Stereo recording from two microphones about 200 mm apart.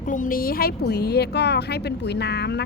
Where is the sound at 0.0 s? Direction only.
40° left (ahead or behind).